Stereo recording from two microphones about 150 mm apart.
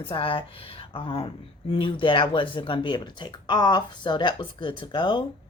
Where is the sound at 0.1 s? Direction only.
35° left (ahead or behind).